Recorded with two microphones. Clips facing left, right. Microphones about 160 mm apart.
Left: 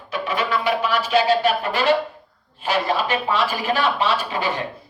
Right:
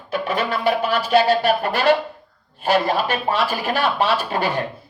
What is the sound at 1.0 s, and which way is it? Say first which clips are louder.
Speech: right 1 dB; 60° right (ahead or behind).